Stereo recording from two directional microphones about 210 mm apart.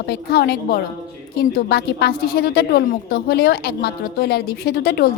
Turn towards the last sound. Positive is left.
turn(degrees=50)  # may be behind; listen again after turning